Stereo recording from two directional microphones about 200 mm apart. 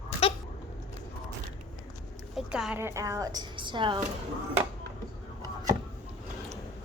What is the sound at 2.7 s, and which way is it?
A woman's voice, 15° right (ahead or behind).